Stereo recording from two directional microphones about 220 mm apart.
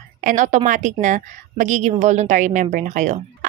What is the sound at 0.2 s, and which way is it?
A woman's voice, 35° right (ahead or behind).